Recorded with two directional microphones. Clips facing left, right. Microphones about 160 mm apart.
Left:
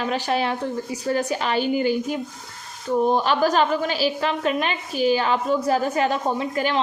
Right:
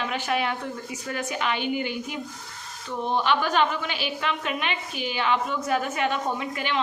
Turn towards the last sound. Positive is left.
turn(degrees=40)  # may be behind; listen again after turning